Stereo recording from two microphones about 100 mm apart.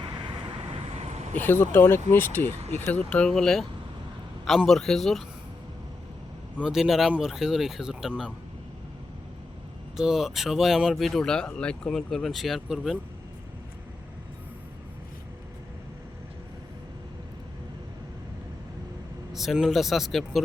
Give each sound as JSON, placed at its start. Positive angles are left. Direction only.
{"t": 1.4, "sound": "speech", "side_deg": 20}
{"t": 6.6, "sound": "speech", "side_deg": -5}
{"t": 10.0, "sound": "speech", "side_deg": -5}
{"t": 19.3, "sound": "speech", "side_deg": -5}